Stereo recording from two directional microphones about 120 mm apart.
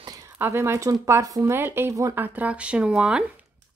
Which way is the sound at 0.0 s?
30° right (ahead or behind).